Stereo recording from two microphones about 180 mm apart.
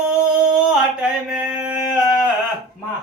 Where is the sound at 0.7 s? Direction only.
5° right (ahead or behind).